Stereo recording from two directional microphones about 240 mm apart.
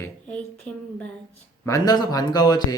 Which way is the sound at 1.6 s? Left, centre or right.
Centre.